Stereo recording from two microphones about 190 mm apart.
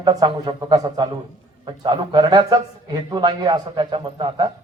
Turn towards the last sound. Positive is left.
turn(degrees=-25)  # may be behind; listen again after turning